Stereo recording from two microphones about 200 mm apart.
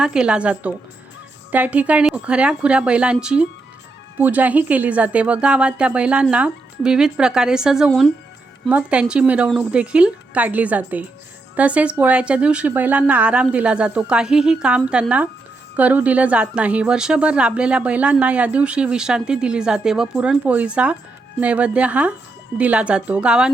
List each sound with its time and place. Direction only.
0.0 s a woman's voice: 5° right (ahead or behind)